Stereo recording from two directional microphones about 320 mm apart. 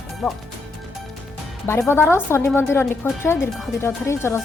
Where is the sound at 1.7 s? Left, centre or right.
Centre.